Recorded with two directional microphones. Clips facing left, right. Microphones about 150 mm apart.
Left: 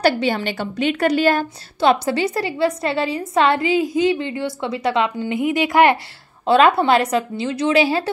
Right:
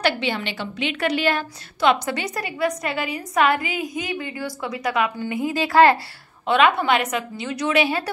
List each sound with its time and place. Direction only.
0.0 s a woman's voice: 45° left (ahead or behind); by 5.9 s 20° left (ahead or behind)
6.4 s a woman's voice: 35° left (ahead or behind)